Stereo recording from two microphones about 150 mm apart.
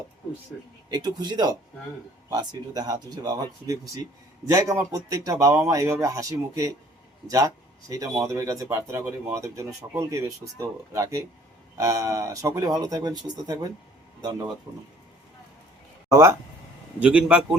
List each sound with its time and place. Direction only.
0.9 s speech: 25° right (ahead or behind)
16.0 s speech: 15° right (ahead or behind)
17.0 s a man's voice: 5° right (ahead or behind)